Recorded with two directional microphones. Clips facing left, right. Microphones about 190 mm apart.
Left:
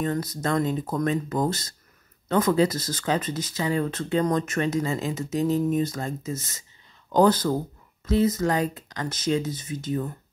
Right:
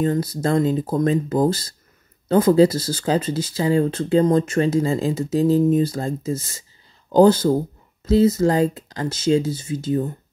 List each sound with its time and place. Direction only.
0.0 s speech: 30° right (ahead or behind)